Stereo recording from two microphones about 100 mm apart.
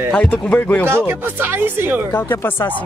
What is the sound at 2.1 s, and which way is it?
Speech, 20° left (ahead or behind).